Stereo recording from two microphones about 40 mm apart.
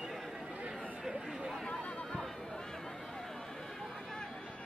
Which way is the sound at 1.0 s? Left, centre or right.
Centre.